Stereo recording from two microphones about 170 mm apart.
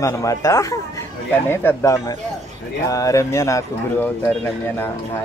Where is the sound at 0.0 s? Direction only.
20° left (ahead or behind).